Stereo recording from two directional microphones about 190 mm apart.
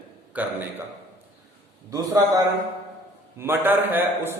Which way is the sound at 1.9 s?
20° right (ahead or behind).